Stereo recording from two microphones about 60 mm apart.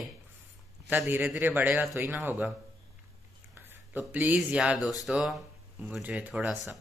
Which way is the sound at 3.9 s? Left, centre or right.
Right.